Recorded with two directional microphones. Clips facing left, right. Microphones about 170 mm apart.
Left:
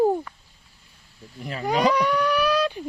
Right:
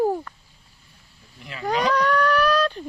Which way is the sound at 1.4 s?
40° left (ahead or behind).